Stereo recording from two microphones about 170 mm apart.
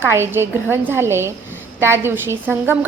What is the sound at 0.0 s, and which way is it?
A woman's voice, 15° right (ahead or behind).